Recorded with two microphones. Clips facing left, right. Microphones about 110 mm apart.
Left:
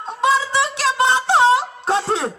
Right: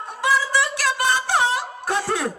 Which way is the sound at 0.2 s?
25° left (ahead or behind).